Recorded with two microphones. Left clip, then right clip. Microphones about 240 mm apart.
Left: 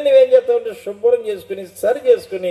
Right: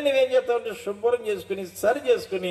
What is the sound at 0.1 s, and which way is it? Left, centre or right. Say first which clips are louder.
A man's voice: left 12 dB; right.